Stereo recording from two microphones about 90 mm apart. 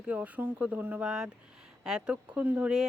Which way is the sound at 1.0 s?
5° right (ahead or behind).